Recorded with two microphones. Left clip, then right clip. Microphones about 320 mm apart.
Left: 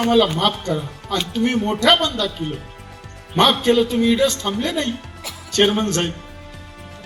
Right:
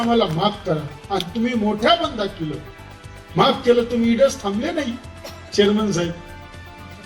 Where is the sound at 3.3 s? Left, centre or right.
Right.